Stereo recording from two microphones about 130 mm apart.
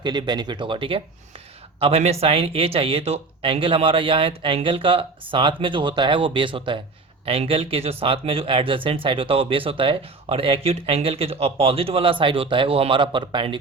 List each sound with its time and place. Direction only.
0.0 s speech: 35° right (ahead or behind)